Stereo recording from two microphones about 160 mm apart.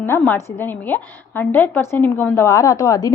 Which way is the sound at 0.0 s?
15° left (ahead or behind).